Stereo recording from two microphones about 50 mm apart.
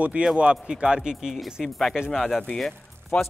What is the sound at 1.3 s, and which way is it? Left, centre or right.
Speech, centre.